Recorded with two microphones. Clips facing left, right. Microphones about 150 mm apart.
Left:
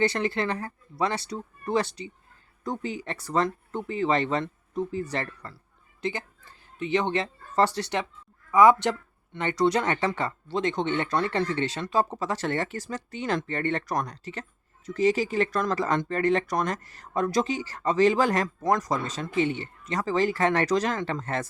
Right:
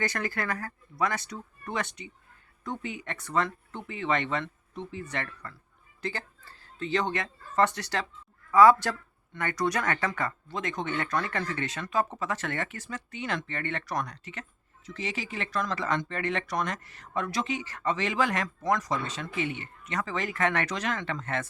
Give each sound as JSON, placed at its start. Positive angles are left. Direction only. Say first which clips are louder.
{"t": 0.0, "sound": "speech", "louder": "left 6 dB", "side_deg": 25}
{"t": 6.0, "sound": "speech", "louder": "left 4 dB", "side_deg": 20}